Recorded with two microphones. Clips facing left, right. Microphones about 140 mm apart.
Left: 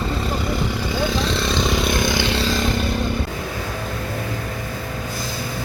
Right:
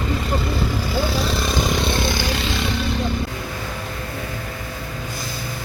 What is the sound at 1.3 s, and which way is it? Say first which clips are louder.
Vehicle: left 1 dB; centre (ahead or behind).